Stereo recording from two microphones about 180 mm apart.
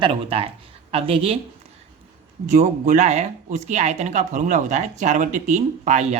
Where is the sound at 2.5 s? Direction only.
40° right (ahead or behind).